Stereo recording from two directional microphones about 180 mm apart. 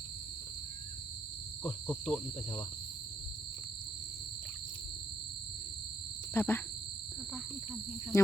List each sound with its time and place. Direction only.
1.9 s cricket: 5° left (ahead or behind)
6.3 s speech: 15° left (ahead or behind)
8.1 s speech: 20° left (ahead or behind)